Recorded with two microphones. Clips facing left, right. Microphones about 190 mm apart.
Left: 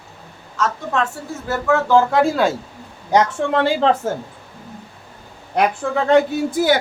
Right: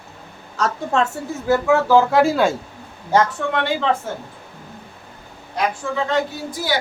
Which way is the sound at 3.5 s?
30° left (ahead or behind).